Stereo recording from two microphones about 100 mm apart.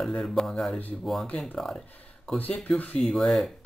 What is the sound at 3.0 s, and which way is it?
Speech, centre (ahead or behind).